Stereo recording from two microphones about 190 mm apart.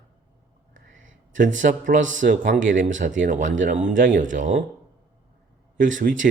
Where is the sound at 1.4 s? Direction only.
40° right (ahead or behind).